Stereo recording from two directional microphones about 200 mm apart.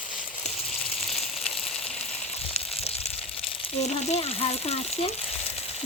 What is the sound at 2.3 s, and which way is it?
Frying, 30° left (ahead or behind).